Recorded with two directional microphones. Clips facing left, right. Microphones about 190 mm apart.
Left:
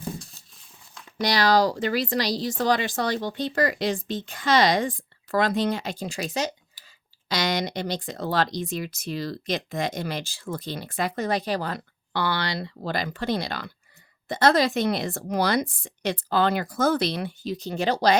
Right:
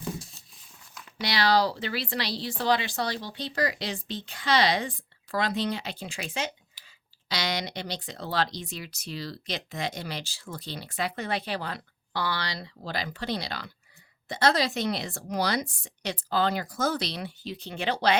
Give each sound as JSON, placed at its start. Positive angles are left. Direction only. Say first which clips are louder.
{"t": 0.2, "sound": "a sound", "louder": "even", "side_deg": 0}
{"t": 1.2, "sound": "speech", "louder": "left 4 dB", "side_deg": 45}
{"t": 12.1, "sound": "speech", "louder": "left 5 dB", "side_deg": 60}